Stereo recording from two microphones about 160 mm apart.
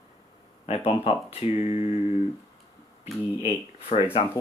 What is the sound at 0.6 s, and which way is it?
Speech, 40° left (ahead or behind).